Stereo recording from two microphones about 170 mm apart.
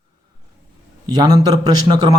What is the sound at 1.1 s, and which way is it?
A man's voice, 25° right (ahead or behind).